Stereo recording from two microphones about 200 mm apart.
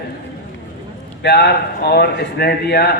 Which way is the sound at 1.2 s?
55° left (ahead or behind).